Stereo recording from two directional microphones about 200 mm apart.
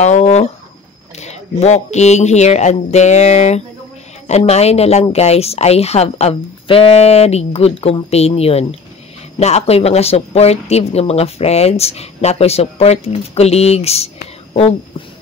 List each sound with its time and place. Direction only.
0.0 s speech: 35° left (ahead or behind)